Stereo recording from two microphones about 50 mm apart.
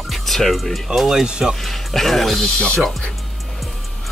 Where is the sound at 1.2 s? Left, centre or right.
Centre.